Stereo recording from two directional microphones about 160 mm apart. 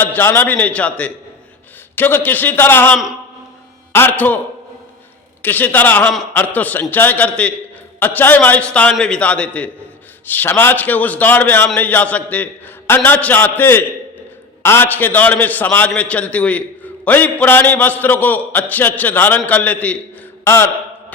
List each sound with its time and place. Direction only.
0.0 s a man's voice: 15° left (ahead or behind)
5.4 s a man's voice: 10° left (ahead or behind)
20.4 s mantra: 15° left (ahead or behind)